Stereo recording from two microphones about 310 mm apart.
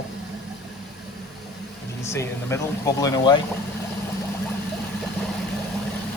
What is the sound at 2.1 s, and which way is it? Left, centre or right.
A man's voice, centre.